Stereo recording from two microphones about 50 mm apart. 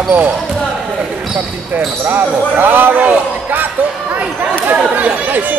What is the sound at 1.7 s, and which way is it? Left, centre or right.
Speech, right.